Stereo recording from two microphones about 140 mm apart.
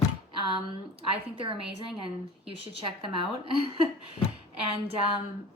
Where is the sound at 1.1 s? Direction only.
40° right (ahead or behind).